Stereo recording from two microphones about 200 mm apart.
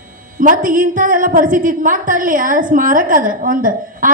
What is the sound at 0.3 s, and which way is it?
A woman's voice, 40° right (ahead or behind).